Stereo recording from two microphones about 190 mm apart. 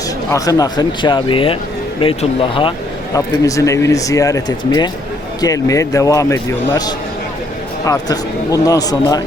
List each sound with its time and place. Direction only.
0.3 s a man's voice: 20° left (ahead or behind)
3.2 s a man's voice: 15° left (ahead or behind)